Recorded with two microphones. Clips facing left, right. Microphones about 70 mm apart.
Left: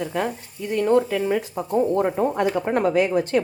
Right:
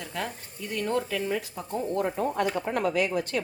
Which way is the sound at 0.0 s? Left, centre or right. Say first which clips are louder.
Left 9 dB; left.